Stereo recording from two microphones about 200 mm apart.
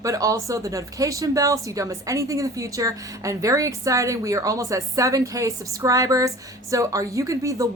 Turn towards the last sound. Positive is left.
turn(degrees=-15)  # may be behind; listen again after turning